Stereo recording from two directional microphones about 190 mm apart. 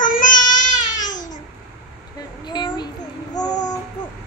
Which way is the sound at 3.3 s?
20° left (ahead or behind).